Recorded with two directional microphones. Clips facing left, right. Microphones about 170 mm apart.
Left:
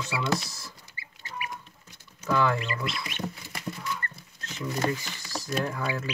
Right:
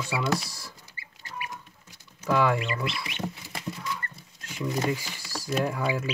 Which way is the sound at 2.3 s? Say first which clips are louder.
Right 2 dB; 10° right (ahead or behind).